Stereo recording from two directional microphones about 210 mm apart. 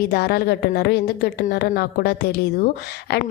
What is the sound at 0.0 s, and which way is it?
A woman's voice, 50° left (ahead or behind).